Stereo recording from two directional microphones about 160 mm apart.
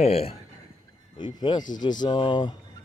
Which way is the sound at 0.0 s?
40° left (ahead or behind).